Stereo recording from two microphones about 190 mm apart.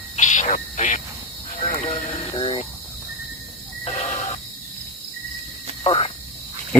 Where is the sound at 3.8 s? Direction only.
30° left (ahead or behind).